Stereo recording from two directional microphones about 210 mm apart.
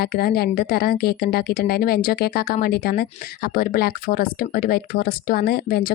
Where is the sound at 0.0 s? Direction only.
45° left (ahead or behind).